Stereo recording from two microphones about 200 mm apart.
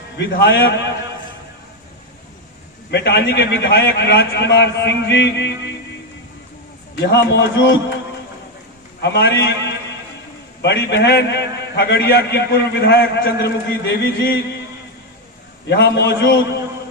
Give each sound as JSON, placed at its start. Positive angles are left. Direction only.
{"t": 0.2, "sound": "a man's voice", "side_deg": 60}
{"t": 2.9, "sound": "a man's voice", "side_deg": 60}
{"t": 6.9, "sound": "a man's voice", "side_deg": 55}
{"t": 9.0, "sound": "a man's voice", "side_deg": 60}
{"t": 15.6, "sound": "a man's voice", "side_deg": 60}